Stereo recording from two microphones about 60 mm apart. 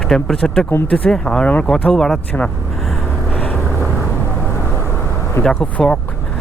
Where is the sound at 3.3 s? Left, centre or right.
Left.